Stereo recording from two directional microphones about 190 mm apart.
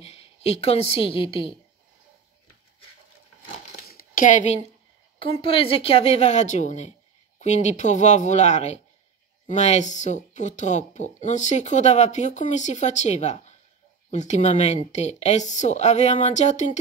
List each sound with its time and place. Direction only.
0.0 s a woman's voice: 30° left (ahead or behind)
3.7 s a sound: 50° left (ahead or behind)
5.2 s speech: 30° left (ahead or behind)